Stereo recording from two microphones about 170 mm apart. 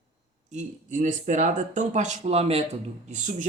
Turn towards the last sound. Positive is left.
turn(degrees=-45)  # may be behind; listen again after turning